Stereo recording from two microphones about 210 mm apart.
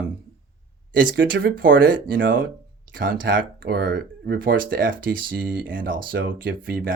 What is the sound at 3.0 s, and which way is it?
Speech, 40° right (ahead or behind).